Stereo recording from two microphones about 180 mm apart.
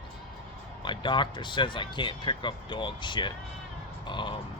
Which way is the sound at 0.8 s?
25° left (ahead or behind).